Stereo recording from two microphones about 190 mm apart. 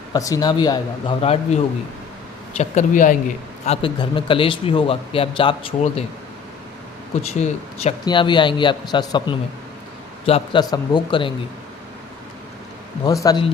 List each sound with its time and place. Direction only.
0.1 s a man's voice: 20° left (ahead or behind)
2.6 s speech: 40° left (ahead or behind)
3.8 s a man's voice: 25° left (ahead or behind)
7.2 s speech: 35° left (ahead or behind)
8.0 s a man's voice: 25° left (ahead or behind)
13.1 s a man's voice: 20° left (ahead or behind)